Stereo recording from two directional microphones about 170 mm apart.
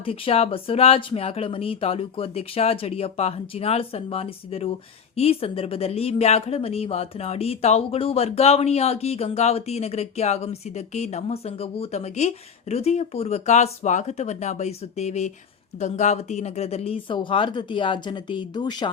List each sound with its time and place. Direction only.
0.0 s speech: 35° left (ahead or behind)